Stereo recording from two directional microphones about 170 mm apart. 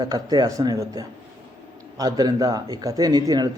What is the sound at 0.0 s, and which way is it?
A man's voice, 25° right (ahead or behind).